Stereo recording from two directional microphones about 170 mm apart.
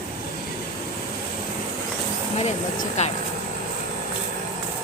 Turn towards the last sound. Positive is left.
turn(degrees=40)  # may be behind; listen again after turning